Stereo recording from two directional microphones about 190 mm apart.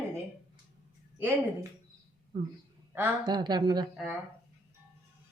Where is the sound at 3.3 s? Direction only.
20° right (ahead or behind).